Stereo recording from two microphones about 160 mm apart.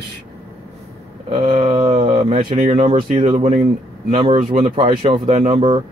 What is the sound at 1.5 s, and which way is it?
Speech, 30° right (ahead or behind).